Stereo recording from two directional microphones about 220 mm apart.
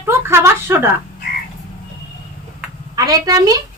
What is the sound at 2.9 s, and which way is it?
Speech, 15° right (ahead or behind).